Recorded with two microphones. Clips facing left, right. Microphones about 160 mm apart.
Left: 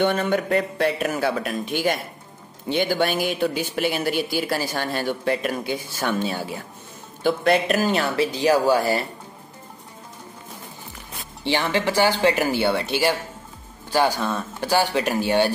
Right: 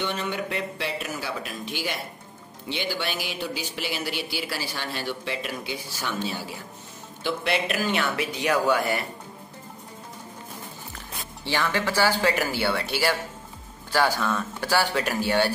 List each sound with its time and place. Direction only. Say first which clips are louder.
0.0 s speech: left 8 dB; 50° left (ahead or behind); by 9.0 s 30° left (ahead or behind)
11.4 s speech: left 4 dB; 20° left (ahead or behind)